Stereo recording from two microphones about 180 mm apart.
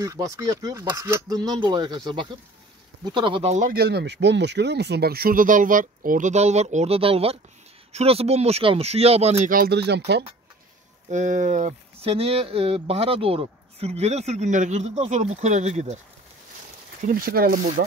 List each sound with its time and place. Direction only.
0.0 s speech: 20° right (ahead or behind); by 3.7 s 40° right (ahead or behind)
3.7 s speech: 65° right (ahead or behind); by 9.5 s 35° right (ahead or behind)
9.5 s speech: 60° right (ahead or behind)
11.1 s speech: 40° right (ahead or behind)
17.0 s speech: 55° right (ahead or behind)